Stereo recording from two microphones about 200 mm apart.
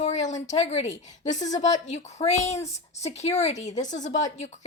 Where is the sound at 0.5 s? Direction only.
30° left (ahead or behind).